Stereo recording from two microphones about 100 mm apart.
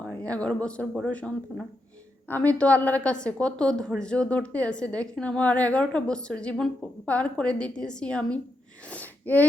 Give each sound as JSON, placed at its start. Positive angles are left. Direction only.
{"t": 0.1, "sound": "a woman's voice", "side_deg": 15}
{"t": 2.3, "sound": "a woman's voice", "side_deg": 15}
{"t": 8.9, "sound": "wheeze", "side_deg": 15}